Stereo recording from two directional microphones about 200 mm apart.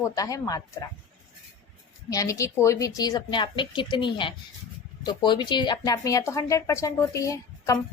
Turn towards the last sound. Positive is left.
turn(degrees=15)  # may be behind; listen again after turning